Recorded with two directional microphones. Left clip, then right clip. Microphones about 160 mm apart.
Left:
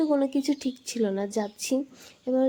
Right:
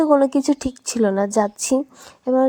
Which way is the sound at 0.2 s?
35° right (ahead or behind).